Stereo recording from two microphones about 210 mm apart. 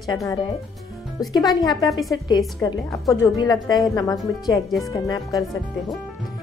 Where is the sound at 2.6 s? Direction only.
15° left (ahead or behind).